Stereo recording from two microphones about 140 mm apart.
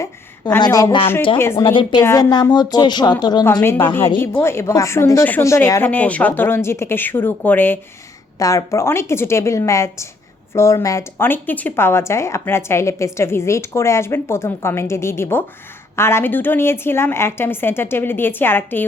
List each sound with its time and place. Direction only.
0.6 s a woman's voice: 25° left (ahead or behind)
1.6 s a woman's voice: 40° left (ahead or behind)
2.0 s a woman's voice: 25° left (ahead or behind)
3.6 s a woman's voice: 15° left (ahead or behind)